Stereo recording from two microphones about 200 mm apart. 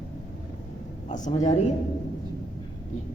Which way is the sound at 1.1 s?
35° left (ahead or behind).